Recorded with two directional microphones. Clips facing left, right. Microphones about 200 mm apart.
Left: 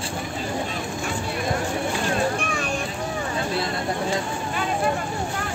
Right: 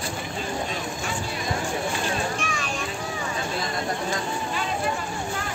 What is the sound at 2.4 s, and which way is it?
Vehicle, 55° left (ahead or behind).